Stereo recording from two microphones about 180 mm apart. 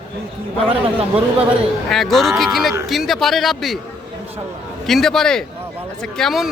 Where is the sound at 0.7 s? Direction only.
30° right (ahead or behind).